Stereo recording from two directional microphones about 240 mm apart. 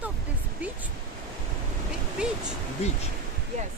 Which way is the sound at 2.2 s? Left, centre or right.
Centre.